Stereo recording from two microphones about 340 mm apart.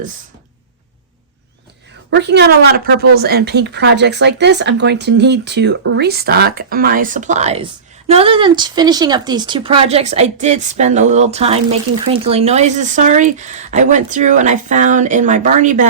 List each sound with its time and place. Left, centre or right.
2.0 s speech: right